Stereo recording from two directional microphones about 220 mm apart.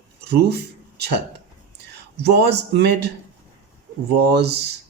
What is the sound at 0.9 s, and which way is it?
Speech, 50° right (ahead or behind).